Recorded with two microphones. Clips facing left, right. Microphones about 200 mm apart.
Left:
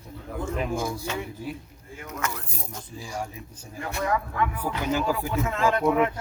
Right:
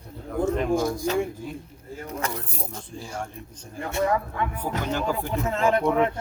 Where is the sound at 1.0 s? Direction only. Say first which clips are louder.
Right 6 dB; 35° right (ahead or behind).